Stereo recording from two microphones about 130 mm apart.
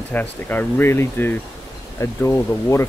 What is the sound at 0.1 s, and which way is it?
Speech, 15° left (ahead or behind).